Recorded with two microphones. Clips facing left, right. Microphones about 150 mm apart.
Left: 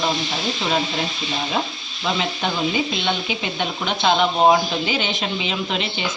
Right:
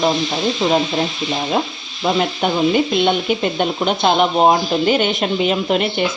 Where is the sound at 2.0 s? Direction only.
50° right (ahead or behind).